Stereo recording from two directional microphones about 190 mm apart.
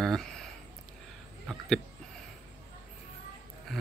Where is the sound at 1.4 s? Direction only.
Centre (ahead or behind).